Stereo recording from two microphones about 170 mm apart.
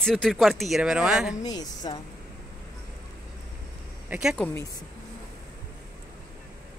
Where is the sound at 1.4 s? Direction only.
20° left (ahead or behind).